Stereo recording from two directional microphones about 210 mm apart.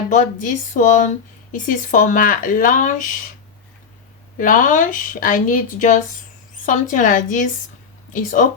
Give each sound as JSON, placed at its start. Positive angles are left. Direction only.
{"t": 0.1, "sound": "speech", "side_deg": 35}
{"t": 4.4, "sound": "speech", "side_deg": 40}